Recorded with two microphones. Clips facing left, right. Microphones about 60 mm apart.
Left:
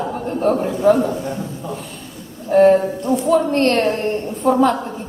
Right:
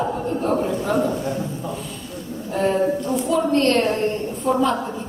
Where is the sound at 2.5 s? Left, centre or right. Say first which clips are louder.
Left 8 dB; left.